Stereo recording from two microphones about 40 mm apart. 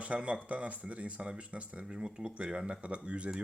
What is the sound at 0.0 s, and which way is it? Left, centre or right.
Speech, right.